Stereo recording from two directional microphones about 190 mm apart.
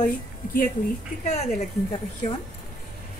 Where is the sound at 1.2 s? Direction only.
40° left (ahead or behind).